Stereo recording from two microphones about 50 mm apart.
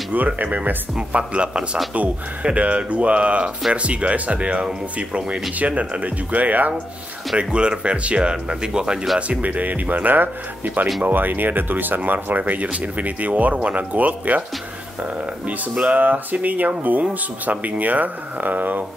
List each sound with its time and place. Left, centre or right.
0.1 s speech: right
0.9 s speech: right
7.3 s speech: right
9.3 s speech: right